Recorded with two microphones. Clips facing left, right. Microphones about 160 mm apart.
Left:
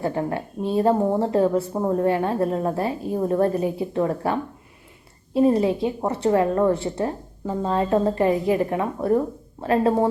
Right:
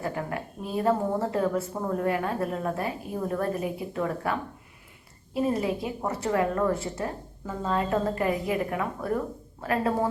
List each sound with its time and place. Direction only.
0.0 s a woman's voice: 30° left (ahead or behind)